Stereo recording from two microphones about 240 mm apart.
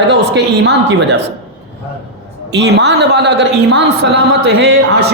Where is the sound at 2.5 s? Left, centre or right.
Right.